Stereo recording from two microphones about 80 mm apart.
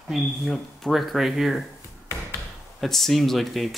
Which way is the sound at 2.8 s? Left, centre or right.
Centre.